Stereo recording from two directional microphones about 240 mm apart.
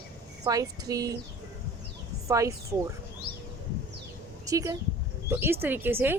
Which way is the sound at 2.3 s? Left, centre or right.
Centre.